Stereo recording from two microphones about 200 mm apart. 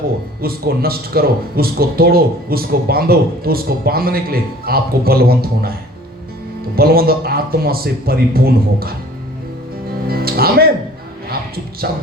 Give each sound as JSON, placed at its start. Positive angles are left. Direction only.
{"t": 0.4, "sound": "speech", "side_deg": -50}
{"t": 6.7, "sound": "speech", "side_deg": -50}
{"t": 10.1, "sound": "music", "side_deg": -50}